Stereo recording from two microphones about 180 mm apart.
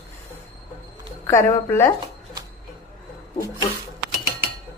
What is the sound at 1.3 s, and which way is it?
Speech, 15° left (ahead or behind).